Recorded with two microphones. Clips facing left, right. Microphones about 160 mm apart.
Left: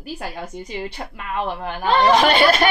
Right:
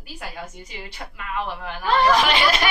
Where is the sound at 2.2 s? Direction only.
50° left (ahead or behind).